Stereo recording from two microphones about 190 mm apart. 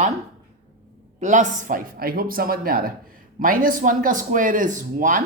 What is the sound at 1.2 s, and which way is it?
Speech, 40° right (ahead or behind).